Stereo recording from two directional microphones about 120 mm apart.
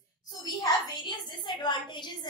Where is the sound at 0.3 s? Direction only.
35° left (ahead or behind).